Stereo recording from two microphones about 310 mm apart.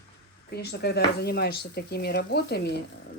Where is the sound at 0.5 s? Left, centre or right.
Left.